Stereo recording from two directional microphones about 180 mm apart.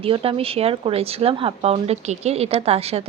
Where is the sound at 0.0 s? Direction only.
30° right (ahead or behind).